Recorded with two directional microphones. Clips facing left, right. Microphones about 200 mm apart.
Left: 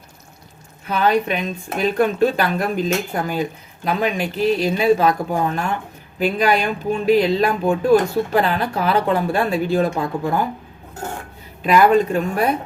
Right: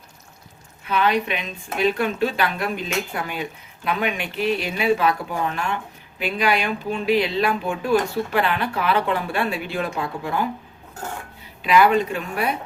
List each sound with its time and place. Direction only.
0.9 s speech: 40° left (ahead or behind)
11.6 s speech: 45° left (ahead or behind)